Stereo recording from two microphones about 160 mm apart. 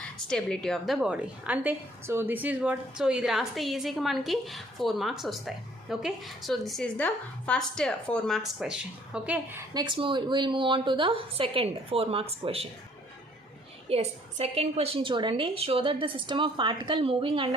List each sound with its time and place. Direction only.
0.0 s a woman's voice: 5° left (ahead or behind)
9.7 s a woman's voice: 30° right (ahead or behind)
13.9 s a woman's voice: 40° right (ahead or behind)